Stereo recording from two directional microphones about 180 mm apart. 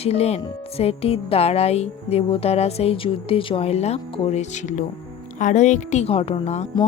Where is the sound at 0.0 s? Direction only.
35° left (ahead or behind).